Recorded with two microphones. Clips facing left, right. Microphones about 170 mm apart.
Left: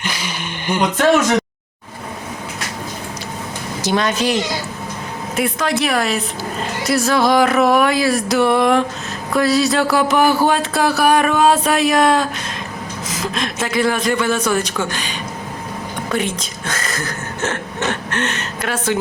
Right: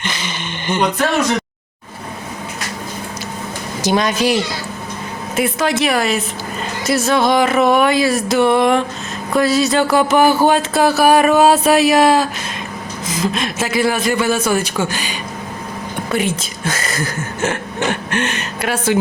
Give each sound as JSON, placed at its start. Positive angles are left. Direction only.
{"t": 0.0, "sound": "speech", "side_deg": 10}
{"t": 3.8, "sound": "speech", "side_deg": -15}
{"t": 5.4, "sound": "music", "side_deg": 0}
{"t": 13.1, "sound": "speech", "side_deg": -5}
{"t": 16.1, "sound": "speech", "side_deg": -5}